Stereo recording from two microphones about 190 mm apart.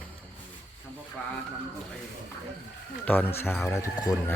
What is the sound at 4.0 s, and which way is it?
Speech, 20° left (ahead or behind).